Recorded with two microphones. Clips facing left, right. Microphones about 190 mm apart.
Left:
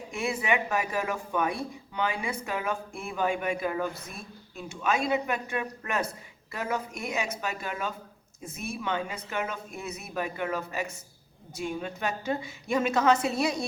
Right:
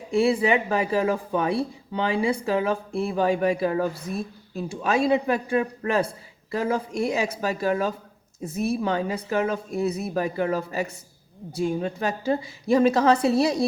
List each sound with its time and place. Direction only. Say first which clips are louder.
0.1 s speech: right 9 dB; 35° right (ahead or behind)